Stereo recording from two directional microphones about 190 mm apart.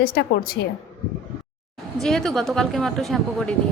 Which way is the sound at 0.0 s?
55° left (ahead or behind).